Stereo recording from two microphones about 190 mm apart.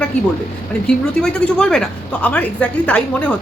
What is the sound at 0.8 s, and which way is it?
Speech, 5° left (ahead or behind).